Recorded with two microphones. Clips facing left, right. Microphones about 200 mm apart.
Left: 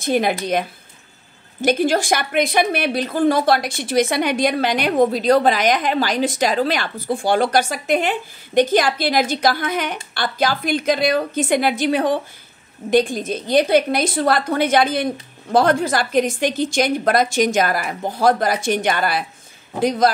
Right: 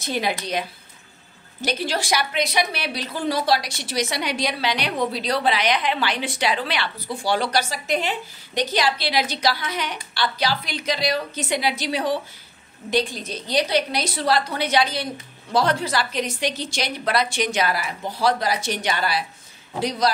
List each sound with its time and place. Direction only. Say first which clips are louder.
0.0 s a woman's voice: left 7 dB; 50° left (ahead or behind)
1.6 s a woman's voice: left 8 dB; 50° left (ahead or behind)